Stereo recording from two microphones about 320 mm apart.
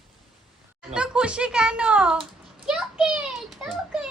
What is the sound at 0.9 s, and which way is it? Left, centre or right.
Speech, centre.